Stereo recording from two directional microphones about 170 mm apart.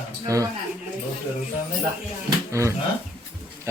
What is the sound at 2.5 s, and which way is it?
Speech, 15° right (ahead or behind).